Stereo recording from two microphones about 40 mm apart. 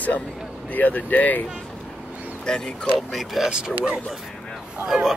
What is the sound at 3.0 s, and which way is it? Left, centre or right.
Speech, centre.